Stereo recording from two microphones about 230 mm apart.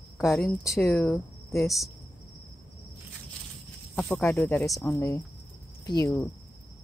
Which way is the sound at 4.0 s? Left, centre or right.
Centre.